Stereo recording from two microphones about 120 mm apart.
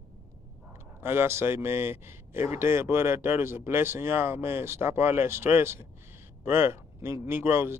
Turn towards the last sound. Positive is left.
turn(degrees=-20)  # may be behind; listen again after turning